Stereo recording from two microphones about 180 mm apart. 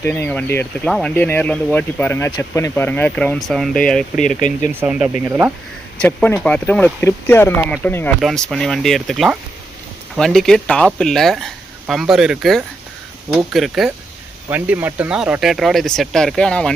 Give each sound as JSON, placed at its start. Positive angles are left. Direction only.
{"t": 0.0, "sound": "speech", "side_deg": 10}
{"t": 4.4, "sound": "speech", "side_deg": 45}
{"t": 4.7, "sound": "speech", "side_deg": -10}
{"t": 6.0, "sound": "speech", "side_deg": 5}